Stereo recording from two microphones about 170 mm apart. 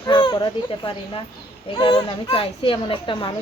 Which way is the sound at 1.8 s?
30° left (ahead or behind).